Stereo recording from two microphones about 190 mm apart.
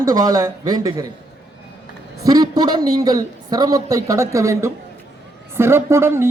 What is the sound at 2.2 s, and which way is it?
A man's voice, 20° right (ahead or behind).